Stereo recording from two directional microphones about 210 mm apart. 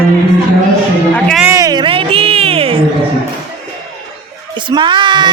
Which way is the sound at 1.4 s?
15° right (ahead or behind).